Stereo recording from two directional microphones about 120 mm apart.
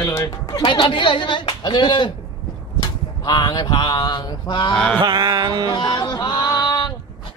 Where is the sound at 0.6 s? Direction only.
45° left (ahead or behind).